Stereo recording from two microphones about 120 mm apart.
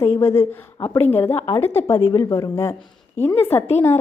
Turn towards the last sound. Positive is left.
turn(degrees=20)  # may be behind; listen again after turning